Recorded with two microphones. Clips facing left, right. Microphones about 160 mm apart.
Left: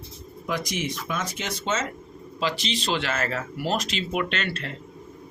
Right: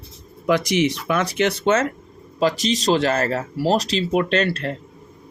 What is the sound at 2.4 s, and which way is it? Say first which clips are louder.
Speech: right 8 dB; 45° right (ahead or behind).